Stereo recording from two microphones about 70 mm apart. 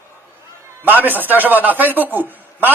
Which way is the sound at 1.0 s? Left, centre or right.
Right.